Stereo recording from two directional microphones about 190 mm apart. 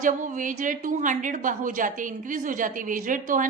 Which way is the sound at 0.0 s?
45° right (ahead or behind).